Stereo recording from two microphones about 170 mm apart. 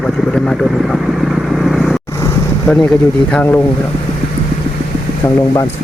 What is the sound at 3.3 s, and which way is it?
Speech, 10° left (ahead or behind).